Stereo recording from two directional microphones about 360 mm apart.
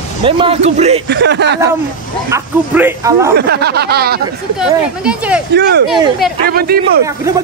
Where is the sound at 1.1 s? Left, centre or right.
Right.